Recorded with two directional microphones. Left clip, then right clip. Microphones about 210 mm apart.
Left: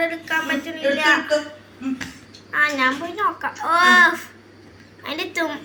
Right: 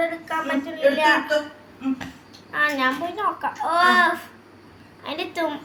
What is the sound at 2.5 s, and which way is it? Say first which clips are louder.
A child's voice: left 3 dB; 10° right (ahead or behind).